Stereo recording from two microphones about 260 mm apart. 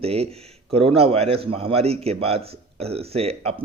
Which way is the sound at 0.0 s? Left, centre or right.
Right.